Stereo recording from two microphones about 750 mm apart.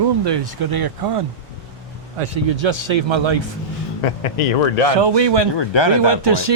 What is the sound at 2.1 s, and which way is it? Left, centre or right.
Speech, right.